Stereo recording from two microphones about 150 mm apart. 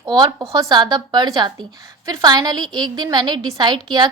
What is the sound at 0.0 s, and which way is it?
A woman's voice, 25° right (ahead or behind).